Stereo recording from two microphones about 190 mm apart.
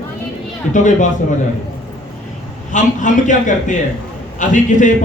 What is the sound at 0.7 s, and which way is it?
Speech, 40° left (ahead or behind).